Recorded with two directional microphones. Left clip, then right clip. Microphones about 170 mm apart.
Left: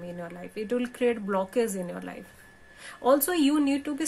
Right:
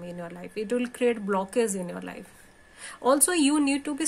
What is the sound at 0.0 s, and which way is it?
A woman's voice, 15° right (ahead or behind).